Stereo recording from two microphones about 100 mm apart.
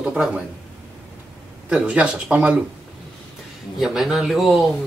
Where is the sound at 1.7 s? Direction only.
10° right (ahead or behind).